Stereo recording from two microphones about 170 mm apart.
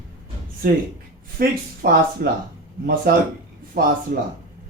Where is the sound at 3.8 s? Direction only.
60° right (ahead or behind).